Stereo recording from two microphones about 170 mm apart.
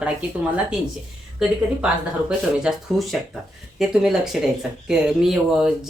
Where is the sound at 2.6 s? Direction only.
Centre (ahead or behind).